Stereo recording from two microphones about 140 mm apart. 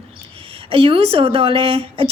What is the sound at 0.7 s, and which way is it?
A woman's voice, 40° right (ahead or behind).